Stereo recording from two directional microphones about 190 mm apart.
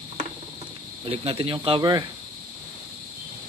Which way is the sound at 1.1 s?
30° right (ahead or behind).